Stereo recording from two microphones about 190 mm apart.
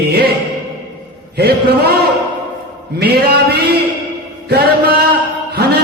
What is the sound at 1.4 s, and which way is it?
Speech, 55° right (ahead or behind).